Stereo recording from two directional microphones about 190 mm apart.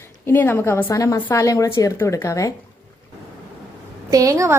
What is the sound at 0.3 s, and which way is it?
Speech, 10° left (ahead or behind).